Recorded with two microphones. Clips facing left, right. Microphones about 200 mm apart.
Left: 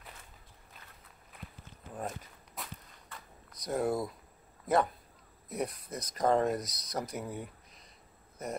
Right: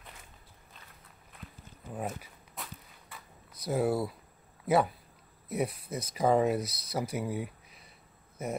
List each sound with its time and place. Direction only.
2.0 s walk: 5° right (ahead or behind)
3.1 s a sound: 5° right (ahead or behind)
4.6 s speech: 5° right (ahead or behind)